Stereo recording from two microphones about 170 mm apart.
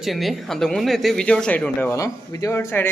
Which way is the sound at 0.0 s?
Centre (ahead or behind).